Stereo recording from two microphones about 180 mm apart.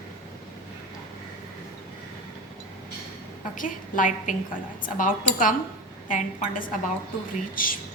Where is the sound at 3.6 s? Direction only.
45° left (ahead or behind).